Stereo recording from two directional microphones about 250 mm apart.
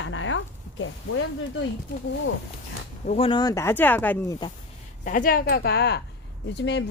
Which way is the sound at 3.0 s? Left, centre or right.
Left.